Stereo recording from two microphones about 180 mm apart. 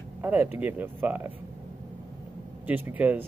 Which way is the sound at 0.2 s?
10° right (ahead or behind).